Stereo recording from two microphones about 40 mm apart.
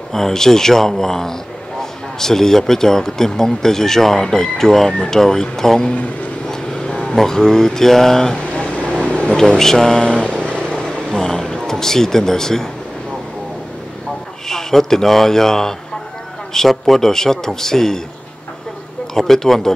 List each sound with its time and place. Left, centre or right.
0.1 s speech: centre
6.5 s vehicle: centre
7.2 s speech: centre
8.5 s vehicle: left
9.0 s a sound: left
9.4 s speech: centre
10.0 s vehicle: left
11.0 s speech: centre
14.5 s a man's voice: centre
19.1 s speech: centre